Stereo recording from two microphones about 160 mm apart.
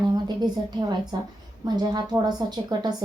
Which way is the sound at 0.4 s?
25° right (ahead or behind).